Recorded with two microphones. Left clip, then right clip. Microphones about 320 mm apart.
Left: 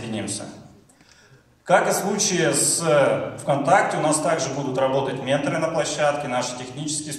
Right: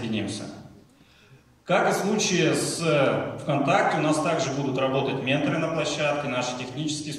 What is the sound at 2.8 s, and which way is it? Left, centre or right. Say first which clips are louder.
Speech: left 5 dB; left.